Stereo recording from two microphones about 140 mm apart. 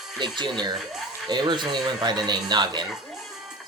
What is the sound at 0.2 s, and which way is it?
Speech, 35° right (ahead or behind).